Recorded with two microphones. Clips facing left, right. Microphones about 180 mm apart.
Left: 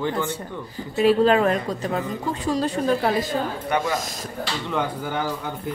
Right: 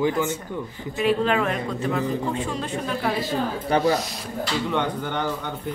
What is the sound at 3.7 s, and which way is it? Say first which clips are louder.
Speech: right 5 dB; 30° right (ahead or behind).